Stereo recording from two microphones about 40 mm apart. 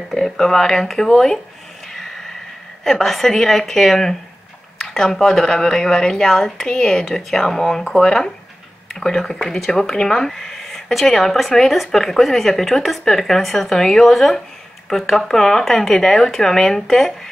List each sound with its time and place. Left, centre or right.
0.1 s speech: centre
2.8 s speech: centre